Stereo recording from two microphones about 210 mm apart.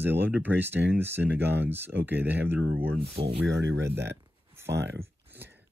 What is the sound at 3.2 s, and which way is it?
Speech, 25° right (ahead or behind).